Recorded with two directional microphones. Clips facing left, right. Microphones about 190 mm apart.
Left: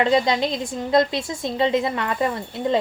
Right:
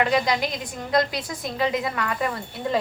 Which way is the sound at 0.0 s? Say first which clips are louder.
Left 3 dB; 25° left (ahead or behind).